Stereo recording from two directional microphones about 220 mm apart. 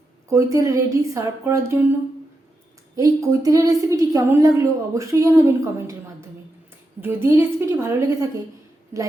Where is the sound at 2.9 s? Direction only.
15° right (ahead or behind).